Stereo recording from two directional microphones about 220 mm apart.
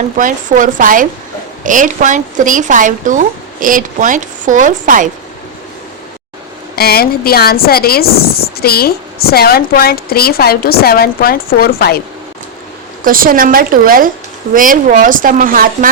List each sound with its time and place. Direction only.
0.2 s speech: 35° right (ahead or behind)
6.7 s speech: 45° left (ahead or behind)
13.1 s speech: 40° right (ahead or behind)